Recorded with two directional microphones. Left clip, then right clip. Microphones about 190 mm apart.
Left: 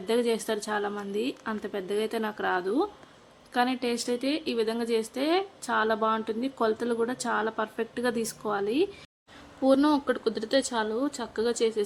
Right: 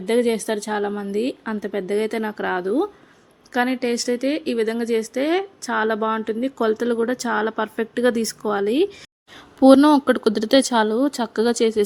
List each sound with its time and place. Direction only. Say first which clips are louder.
0.0 s a woman's voice: right 7 dB; 20° right (ahead or behind)
9.6 s speech: right 10 dB; 45° right (ahead or behind)